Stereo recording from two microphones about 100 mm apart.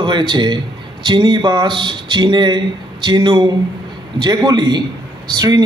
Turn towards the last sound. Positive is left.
turn(degrees=-45)  # may be behind; listen again after turning